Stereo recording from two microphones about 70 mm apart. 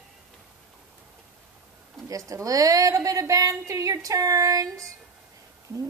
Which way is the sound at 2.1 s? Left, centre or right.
Right.